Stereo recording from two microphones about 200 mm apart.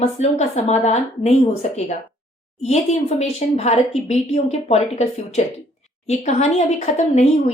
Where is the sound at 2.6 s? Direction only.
35° left (ahead or behind).